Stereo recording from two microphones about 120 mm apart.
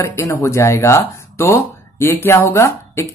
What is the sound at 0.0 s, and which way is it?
Speech, 25° left (ahead or behind).